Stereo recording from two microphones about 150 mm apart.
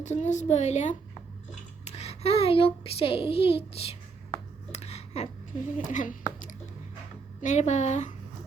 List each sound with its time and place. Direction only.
0.0 s a woman's voice: 50° left (ahead or behind)
4.7 s a sound: 45° left (ahead or behind)
5.7 s a woman's voice: 55° left (ahead or behind)